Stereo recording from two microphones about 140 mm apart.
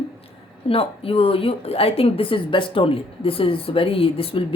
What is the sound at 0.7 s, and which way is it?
Speech, 40° left (ahead or behind).